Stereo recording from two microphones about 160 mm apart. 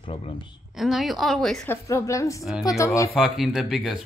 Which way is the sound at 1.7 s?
20° left (ahead or behind).